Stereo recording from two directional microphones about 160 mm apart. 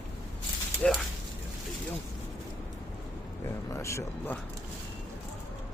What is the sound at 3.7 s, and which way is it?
Speech, 20° left (ahead or behind).